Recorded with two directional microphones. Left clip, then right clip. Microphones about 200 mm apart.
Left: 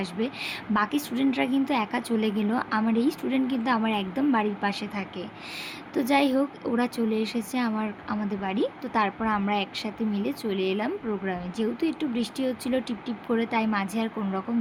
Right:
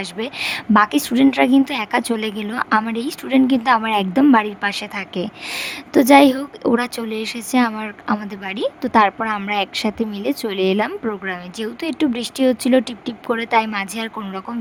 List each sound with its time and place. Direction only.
0.0 s a woman's voice: 60° right (ahead or behind)